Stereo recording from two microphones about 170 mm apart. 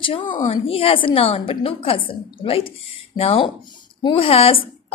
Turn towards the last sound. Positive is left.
turn(degrees=35)  # may be behind; listen again after turning